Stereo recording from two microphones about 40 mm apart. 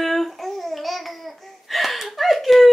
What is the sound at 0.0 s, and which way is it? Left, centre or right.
Babbling, centre.